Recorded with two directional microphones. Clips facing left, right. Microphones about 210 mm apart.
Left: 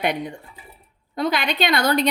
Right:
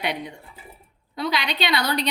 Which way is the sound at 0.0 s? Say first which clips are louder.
Left 5 dB; 50° left (ahead or behind).